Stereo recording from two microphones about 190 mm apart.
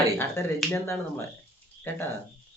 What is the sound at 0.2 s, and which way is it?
Speech, 15° left (ahead or behind).